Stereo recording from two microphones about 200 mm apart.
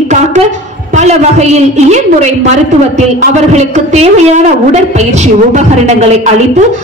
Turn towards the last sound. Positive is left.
turn(degrees=-35)  # may be behind; listen again after turning